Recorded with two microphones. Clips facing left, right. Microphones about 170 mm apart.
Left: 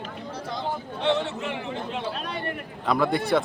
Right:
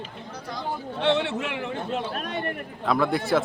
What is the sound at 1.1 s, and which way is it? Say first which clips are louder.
Speech: right 2 dB; 65° right (ahead or behind).